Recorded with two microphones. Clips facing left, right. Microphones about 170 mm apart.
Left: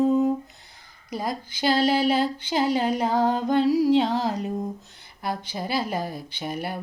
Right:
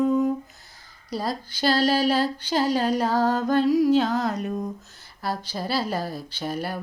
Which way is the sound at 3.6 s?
30° left (ahead or behind).